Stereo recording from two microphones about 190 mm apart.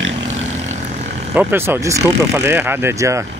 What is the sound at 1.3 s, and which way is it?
Speech, 10° right (ahead or behind).